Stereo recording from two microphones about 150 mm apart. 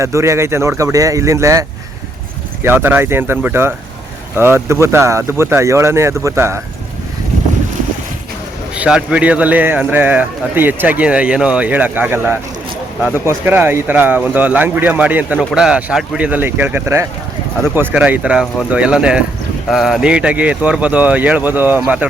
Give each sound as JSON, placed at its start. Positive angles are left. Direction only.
{"t": 0.0, "sound": "speech", "side_deg": -20}
{"t": 2.6, "sound": "speech", "side_deg": -15}
{"t": 8.7, "sound": "speech", "side_deg": -5}